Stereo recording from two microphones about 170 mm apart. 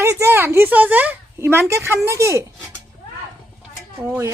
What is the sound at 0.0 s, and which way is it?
Speech, 15° right (ahead or behind).